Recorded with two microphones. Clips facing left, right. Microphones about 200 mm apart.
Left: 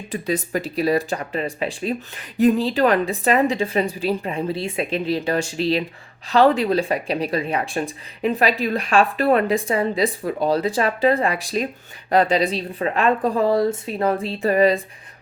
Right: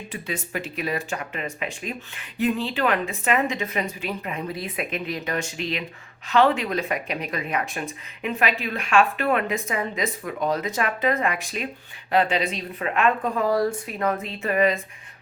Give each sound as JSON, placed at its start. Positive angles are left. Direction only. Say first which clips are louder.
{"t": 0.1, "sound": "speech", "louder": "left 9 dB", "side_deg": 40}